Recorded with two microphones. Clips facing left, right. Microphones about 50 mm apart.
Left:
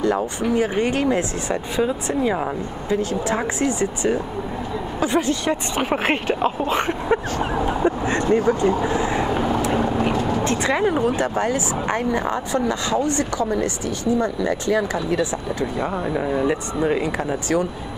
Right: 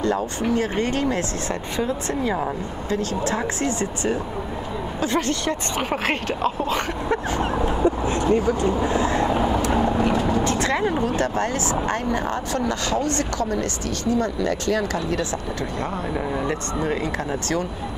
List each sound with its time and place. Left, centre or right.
0.0 s speech: centre
7.8 s speech: left
9.0 s vehicle: centre
10.6 s speech: centre